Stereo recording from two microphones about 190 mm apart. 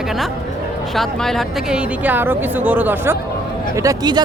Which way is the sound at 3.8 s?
20° right (ahead or behind).